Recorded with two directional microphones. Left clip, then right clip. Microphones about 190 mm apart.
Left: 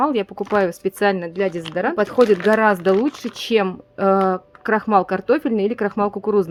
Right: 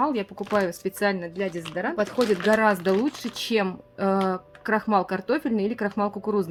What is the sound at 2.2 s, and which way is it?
Speech, 40° left (ahead or behind).